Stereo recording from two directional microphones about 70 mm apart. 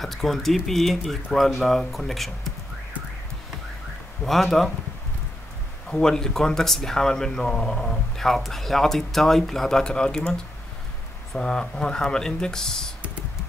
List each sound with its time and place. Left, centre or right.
0.0 s speech: centre
4.2 s speech: centre
5.9 s speech: centre